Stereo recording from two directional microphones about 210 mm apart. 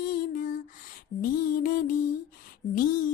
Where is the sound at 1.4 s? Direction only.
40° left (ahead or behind).